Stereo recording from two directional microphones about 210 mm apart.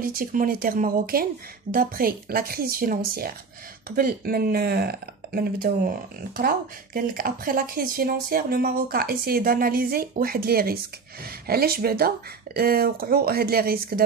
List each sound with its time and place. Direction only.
0.0 s speech: 40° right (ahead or behind)